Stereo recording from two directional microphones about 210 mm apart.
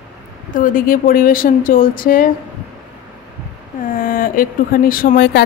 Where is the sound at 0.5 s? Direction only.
40° left (ahead or behind).